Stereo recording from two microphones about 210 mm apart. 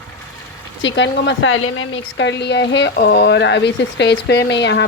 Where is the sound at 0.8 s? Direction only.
60° left (ahead or behind).